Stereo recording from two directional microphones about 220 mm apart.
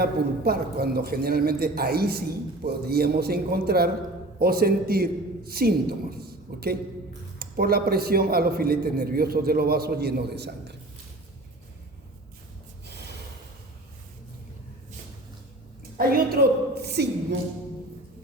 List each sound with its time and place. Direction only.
0.0 s a man's voice: 45° right (ahead or behind)
16.0 s a man's voice: 45° right (ahead or behind)